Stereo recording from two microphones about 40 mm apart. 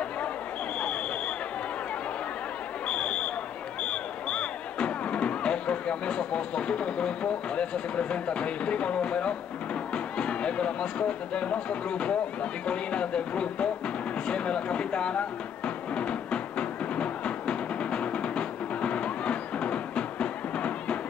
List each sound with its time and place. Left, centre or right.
2.9 s a sound: left
3.8 s speech: left
12.6 s music: left